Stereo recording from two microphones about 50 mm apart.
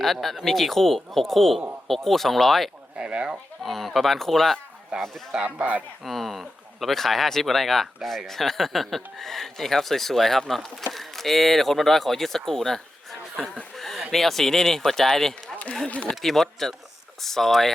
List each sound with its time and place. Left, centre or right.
0.0 s speech: centre
3.0 s speech: right
3.6 s speech: centre
5.3 s speech: right
6.1 s speech: centre
13.7 s a sound: centre
14.1 s speech: centre
15.5 s a sound: left
16.0 s speech: centre